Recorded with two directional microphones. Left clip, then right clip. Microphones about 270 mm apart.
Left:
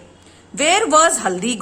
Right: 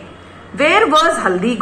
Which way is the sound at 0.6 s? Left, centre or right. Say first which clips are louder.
Right 2 dB; left.